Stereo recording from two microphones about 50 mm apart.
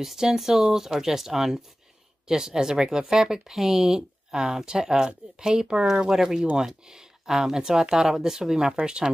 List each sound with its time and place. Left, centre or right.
0.0 s speech: centre